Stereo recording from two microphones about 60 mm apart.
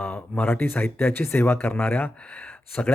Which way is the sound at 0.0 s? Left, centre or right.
Left.